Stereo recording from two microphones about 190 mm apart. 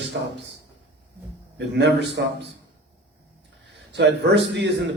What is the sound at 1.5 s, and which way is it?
Speech, 65° right (ahead or behind).